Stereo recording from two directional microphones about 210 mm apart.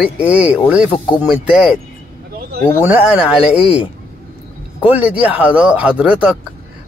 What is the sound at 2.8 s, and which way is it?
Speech, 10° right (ahead or behind).